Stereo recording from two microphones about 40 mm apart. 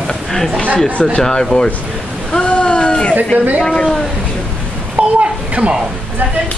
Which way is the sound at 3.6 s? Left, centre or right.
Left.